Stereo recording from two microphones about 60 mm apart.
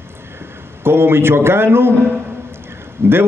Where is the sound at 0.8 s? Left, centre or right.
Right.